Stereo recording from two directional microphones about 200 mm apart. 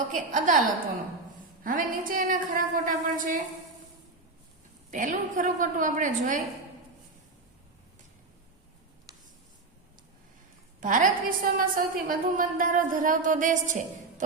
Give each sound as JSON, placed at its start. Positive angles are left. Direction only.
{"t": 0.1, "sound": "a woman's voice", "side_deg": -40}
{"t": 1.6, "sound": "a woman's voice", "side_deg": -45}
{"t": 4.9, "sound": "a woman's voice", "side_deg": -40}
{"t": 10.8, "sound": "a woman's voice", "side_deg": -40}